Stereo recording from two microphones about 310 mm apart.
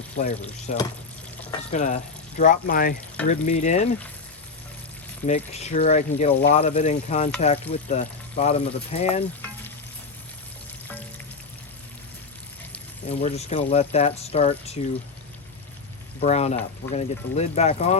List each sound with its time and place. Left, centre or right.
0.2 s speech: left
5.2 s speech: left
13.1 s speech: left
16.2 s speech: left